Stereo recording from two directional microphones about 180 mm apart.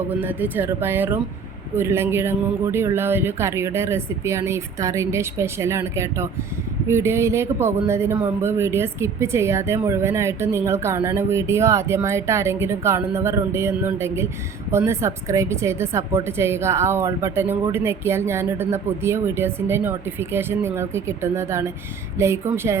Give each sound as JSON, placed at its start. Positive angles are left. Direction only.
{"t": 0.1, "sound": "speech", "side_deg": -10}